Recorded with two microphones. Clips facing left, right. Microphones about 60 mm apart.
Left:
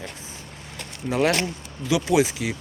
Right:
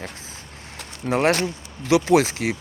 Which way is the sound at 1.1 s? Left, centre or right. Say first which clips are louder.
Right 2 dB; right.